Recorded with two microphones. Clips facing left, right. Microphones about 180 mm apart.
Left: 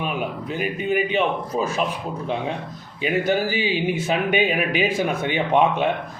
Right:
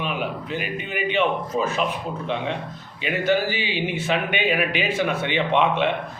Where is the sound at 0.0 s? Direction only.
40° left (ahead or behind).